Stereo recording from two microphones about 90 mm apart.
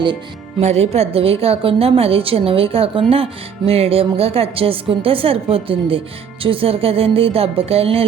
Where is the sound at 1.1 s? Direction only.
90° right.